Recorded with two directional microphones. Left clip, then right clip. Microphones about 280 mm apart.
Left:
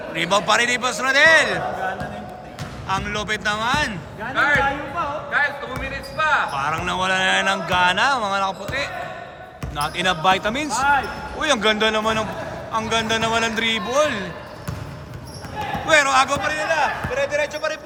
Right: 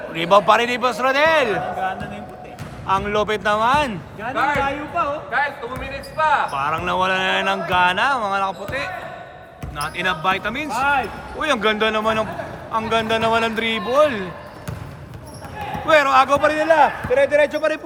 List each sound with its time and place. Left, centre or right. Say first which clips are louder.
0.1 s a man's voice: right 4 dB; centre
2.8 s a man's voice: right 5 dB; centre
5.3 s speech: left 1 dB; centre
15.9 s speech: right 2 dB; centre
16.4 s a man's voice: right 6 dB; centre